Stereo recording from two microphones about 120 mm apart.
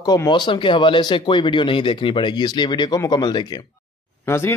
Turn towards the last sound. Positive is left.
turn(degrees=20)  # may be behind; listen again after turning